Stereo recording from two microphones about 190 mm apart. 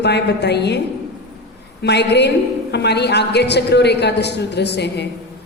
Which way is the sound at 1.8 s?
60° left (ahead or behind).